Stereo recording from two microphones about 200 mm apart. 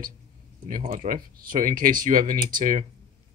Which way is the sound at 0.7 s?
40° right (ahead or behind).